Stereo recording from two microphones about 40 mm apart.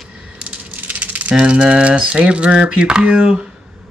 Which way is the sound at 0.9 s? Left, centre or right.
Right.